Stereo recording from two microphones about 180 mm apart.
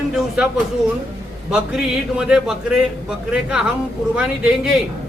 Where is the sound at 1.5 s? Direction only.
5° right (ahead or behind).